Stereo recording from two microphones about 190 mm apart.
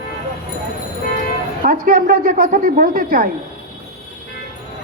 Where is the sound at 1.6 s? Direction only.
50° right (ahead or behind).